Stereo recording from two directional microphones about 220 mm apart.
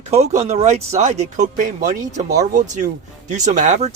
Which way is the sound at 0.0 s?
30° right (ahead or behind).